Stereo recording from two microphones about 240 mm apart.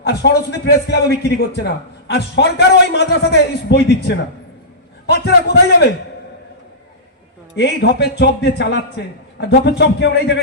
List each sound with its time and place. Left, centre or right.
0.0 s a man's voice: left
7.5 s a man's voice: left